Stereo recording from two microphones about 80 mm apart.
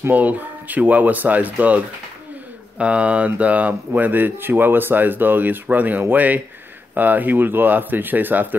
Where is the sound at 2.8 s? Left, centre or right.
Centre.